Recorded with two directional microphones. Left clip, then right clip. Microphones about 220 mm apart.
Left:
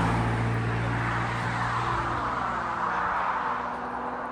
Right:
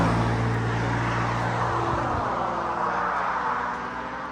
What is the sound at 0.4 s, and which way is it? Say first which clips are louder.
Vehicle: right 3 dB; 20° right (ahead or behind).